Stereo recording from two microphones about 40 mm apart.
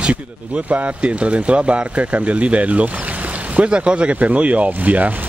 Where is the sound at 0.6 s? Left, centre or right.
Right.